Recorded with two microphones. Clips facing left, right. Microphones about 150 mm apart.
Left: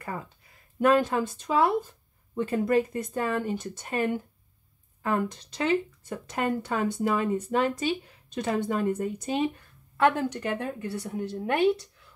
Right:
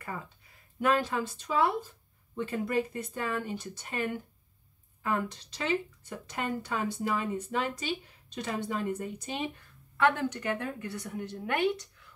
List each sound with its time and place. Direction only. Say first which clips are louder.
0.7 s speech: left 6 dB; 50° left (ahead or behind)
9.9 s a woman's voice: left 3 dB; 35° left (ahead or behind)